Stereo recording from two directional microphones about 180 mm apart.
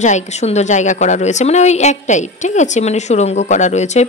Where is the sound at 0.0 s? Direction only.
40° left (ahead or behind).